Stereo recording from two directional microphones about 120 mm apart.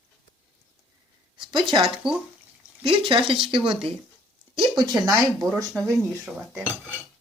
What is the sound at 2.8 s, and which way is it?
Speech, 45° right (ahead or behind).